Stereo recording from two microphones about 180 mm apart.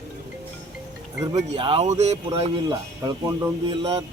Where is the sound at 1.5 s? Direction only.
30° right (ahead or behind).